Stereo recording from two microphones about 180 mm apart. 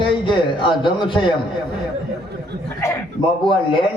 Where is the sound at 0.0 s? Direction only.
25° left (ahead or behind).